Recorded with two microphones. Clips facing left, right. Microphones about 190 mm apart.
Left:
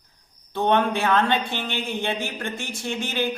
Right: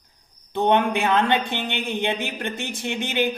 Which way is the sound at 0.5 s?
15° right (ahead or behind).